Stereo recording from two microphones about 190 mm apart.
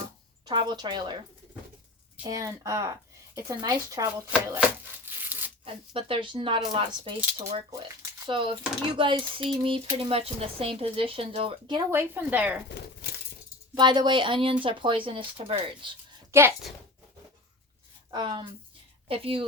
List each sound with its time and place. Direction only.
0.4 s speech: 20° right (ahead or behind)
2.2 s speech: 20° right (ahead or behind)
4.3 s a woman's voice: 10° right (ahead or behind)
5.1 s a sound: 10° right (ahead or behind)
5.9 s speech: 30° right (ahead or behind)
8.3 s speech: 25° right (ahead or behind)
11.9 s a woman's voice: 10° right (ahead or behind)
12.6 s a sound: 60° left (ahead or behind)
13.7 s speech: 25° right (ahead or behind)
16.3 s a woman's voice: 15° right (ahead or behind)
18.1 s a woman's voice: 25° right (ahead or behind)